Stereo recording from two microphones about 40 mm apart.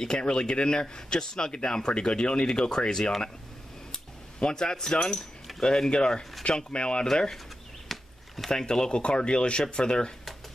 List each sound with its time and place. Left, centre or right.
0.0 s speech: centre
3.9 s keys jangling: centre
5.6 s speech: centre
7.9 s a sound: centre
8.5 s speech: centre